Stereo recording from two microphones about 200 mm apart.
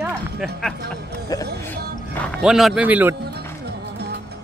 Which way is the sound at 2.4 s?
Centre (ahead or behind).